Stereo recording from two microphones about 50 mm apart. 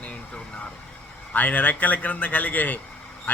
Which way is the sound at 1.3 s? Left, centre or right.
Left.